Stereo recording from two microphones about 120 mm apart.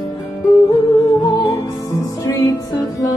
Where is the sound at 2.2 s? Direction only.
25° left (ahead or behind).